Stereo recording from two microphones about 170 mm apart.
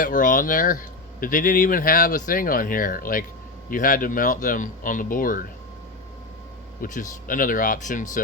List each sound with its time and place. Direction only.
0.0 s speech: 50° left (ahead or behind)
6.8 s speech: 50° left (ahead or behind)